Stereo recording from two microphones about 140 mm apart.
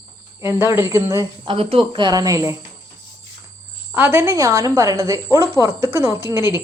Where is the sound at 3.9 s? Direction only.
15° right (ahead or behind).